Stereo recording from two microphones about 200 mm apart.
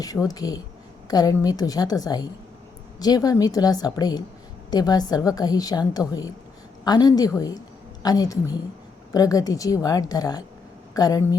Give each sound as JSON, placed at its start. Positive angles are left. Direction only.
{"t": 0.0, "sound": "a woman's voice", "side_deg": 20}